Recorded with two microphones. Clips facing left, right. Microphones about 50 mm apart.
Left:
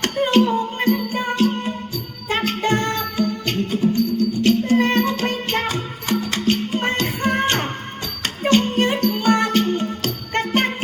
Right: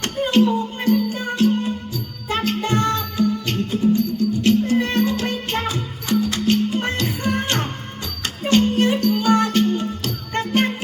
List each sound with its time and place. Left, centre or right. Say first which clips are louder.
0.0 s music: left 1 dB; left